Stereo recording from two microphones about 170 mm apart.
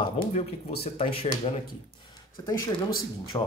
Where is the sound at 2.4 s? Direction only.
15° left (ahead or behind).